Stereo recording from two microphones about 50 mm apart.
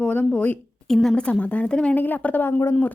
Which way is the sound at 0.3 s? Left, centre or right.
Left.